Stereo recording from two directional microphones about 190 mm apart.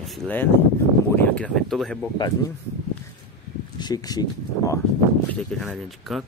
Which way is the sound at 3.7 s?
20° left (ahead or behind).